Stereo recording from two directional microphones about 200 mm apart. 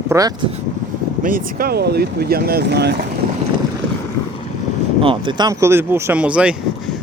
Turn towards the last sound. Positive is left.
turn(degrees=-5)  # may be behind; listen again after turning